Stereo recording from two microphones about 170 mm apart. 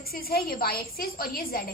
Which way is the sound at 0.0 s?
60° left (ahead or behind).